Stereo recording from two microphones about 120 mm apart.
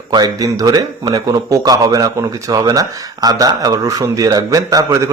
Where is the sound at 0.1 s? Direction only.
30° right (ahead or behind).